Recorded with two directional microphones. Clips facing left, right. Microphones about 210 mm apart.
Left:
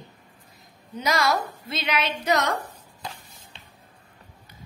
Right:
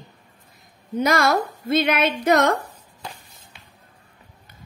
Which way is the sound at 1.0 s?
55° right (ahead or behind).